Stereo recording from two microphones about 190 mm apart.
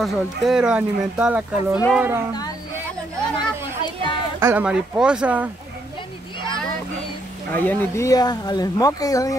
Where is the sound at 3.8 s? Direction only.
25° left (ahead or behind).